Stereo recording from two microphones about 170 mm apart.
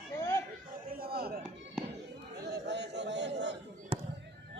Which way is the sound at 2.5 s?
90° right.